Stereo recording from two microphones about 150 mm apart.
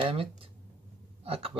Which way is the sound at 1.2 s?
40° right (ahead or behind).